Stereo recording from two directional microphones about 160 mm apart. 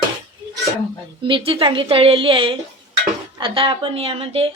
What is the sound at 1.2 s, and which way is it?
Speech, 35° right (ahead or behind).